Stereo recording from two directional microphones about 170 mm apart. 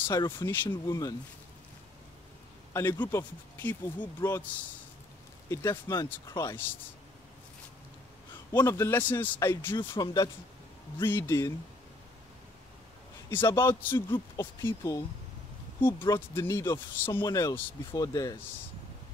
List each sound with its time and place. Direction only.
0.1 s speech: 15° left (ahead or behind)
2.7 s speech: 15° left (ahead or behind)
8.5 s speech: 15° left (ahead or behind)
9.8 s speech: 25° left (ahead or behind)
11.1 s speech: 15° left (ahead or behind)
13.3 s speech: 15° left (ahead or behind)
16.3 s speech: 15° left (ahead or behind)